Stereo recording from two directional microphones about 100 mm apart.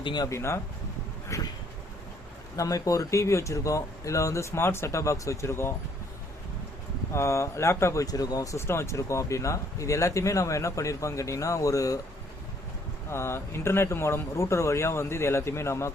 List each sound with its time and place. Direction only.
0.0 s speech: 50° left (ahead or behind)
0.3 s speech: 25° left (ahead or behind)
2.6 s speech: 35° left (ahead or behind)
7.1 s speech: 30° left (ahead or behind)
13.1 s speech: 25° left (ahead or behind)